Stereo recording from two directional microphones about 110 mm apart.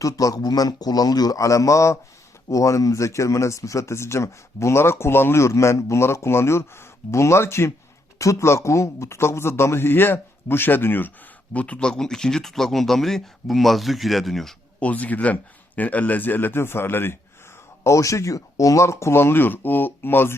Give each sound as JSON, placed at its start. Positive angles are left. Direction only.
{"t": 0.0, "sound": "a man's voice", "side_deg": 30}
{"t": 14.8, "sound": "speech", "side_deg": 15}